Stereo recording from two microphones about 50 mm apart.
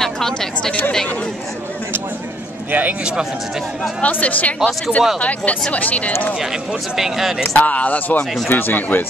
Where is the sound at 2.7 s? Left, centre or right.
Right.